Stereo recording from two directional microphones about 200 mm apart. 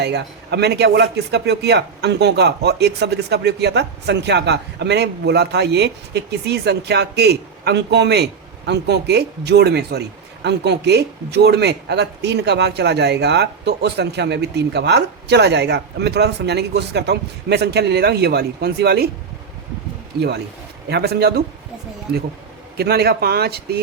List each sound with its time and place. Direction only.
0.0 s a man's voice: 55° right (ahead or behind)
20.1 s a man's voice: 55° right (ahead or behind)
22.8 s speech: 55° right (ahead or behind)